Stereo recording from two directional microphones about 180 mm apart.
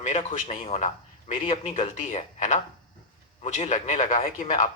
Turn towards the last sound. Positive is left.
turn(degrees=45)  # may be behind; listen again after turning